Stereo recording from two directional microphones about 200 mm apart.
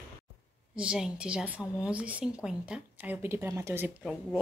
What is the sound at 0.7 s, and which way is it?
A woman's voice, 5° right (ahead or behind).